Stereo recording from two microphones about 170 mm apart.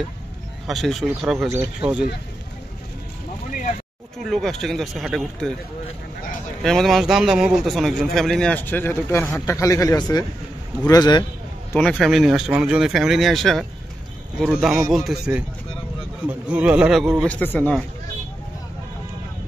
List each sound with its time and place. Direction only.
0.7 s a man's voice: centre (ahead or behind)
4.2 s a man's voice: centre (ahead or behind)
6.6 s a man's voice: centre (ahead or behind); by 11.2 s 25° left (ahead or behind)
11.7 s a man's voice: 5° left (ahead or behind)
17.3 s speech: 10° left (ahead or behind)